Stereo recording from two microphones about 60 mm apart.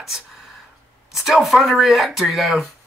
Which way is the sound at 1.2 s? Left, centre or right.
Centre.